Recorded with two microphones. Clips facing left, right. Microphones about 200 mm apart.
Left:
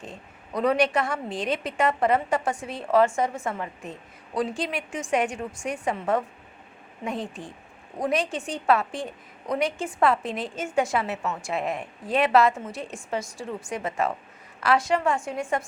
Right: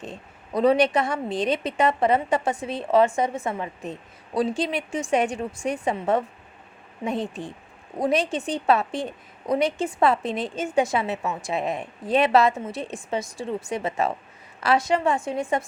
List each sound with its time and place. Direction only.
0.5 s a woman's voice: 30° right (ahead or behind)
13.7 s a woman's voice: 25° right (ahead or behind)